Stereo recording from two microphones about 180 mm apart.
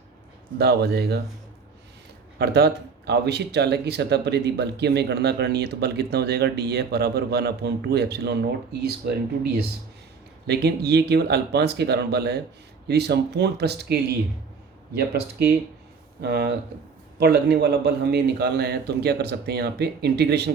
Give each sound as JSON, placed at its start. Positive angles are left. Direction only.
{"t": 0.6, "sound": "speech", "side_deg": -65}
{"t": 2.4, "sound": "speech", "side_deg": -65}
{"t": 10.4, "sound": "speech", "side_deg": -65}